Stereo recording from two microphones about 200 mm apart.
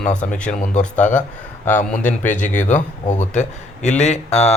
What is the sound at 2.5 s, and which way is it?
Speech, 40° left (ahead or behind).